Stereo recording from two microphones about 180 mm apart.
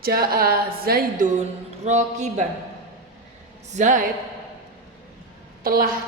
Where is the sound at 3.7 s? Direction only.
45° right (ahead or behind).